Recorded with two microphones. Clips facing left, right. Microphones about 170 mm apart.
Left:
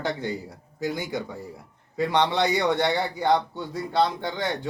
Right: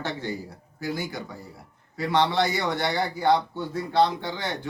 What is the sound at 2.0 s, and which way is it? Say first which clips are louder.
A man's voice: even; 20° left (ahead or behind).